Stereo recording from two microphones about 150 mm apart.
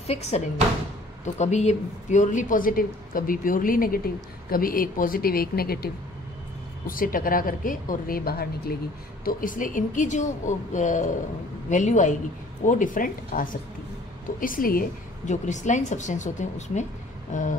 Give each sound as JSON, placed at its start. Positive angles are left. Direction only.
{"t": 0.0, "sound": "speech", "side_deg": 45}
{"t": 6.9, "sound": "speech", "side_deg": 70}
{"t": 9.2, "sound": "a woman's voice", "side_deg": 65}